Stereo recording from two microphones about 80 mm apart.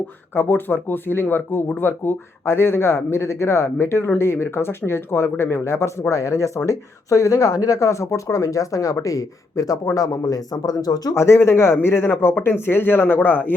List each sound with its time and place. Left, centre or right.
0.3 s speech: left
11.1 s speech: left